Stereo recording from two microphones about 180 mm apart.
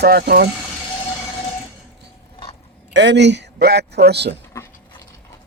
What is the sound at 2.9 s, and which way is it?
A man's voice, 80° right.